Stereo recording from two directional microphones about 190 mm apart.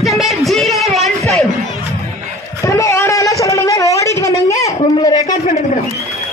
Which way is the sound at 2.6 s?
15° left (ahead or behind).